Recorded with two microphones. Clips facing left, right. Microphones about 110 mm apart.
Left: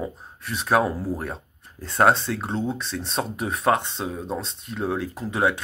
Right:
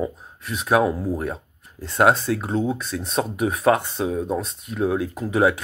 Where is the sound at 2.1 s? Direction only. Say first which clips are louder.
Right 3 dB; 5° right (ahead or behind).